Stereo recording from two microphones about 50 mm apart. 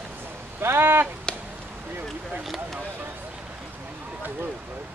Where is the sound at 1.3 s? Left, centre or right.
Centre.